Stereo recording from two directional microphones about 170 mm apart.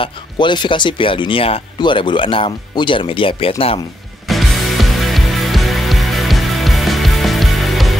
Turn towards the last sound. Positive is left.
turn(degrees=0)  # may be behind; listen again after turning